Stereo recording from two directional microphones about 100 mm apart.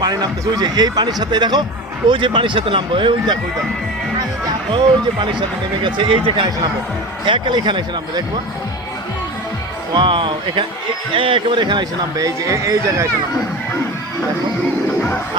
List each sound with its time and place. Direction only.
0.0 s speech: 45° right (ahead or behind)
5.8 s speech: 60° right (ahead or behind)
9.9 s speech: 55° right (ahead or behind); by 13.1 s 30° right (ahead or behind)